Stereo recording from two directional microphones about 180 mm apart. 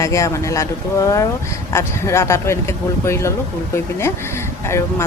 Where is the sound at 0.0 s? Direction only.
15° left (ahead or behind).